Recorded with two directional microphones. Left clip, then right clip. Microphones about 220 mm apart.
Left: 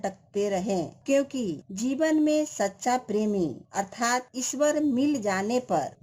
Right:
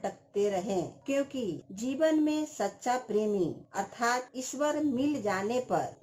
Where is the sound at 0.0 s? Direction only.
45° left (ahead or behind).